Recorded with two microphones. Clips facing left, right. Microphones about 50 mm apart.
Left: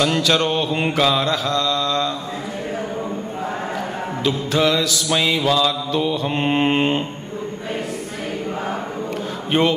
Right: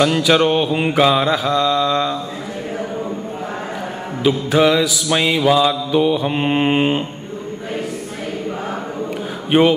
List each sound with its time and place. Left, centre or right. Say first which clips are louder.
0.0 s mantra: right 4 dB; centre
4.2 s mantra: right 5 dB; centre
9.5 s mantra: right 5 dB; centre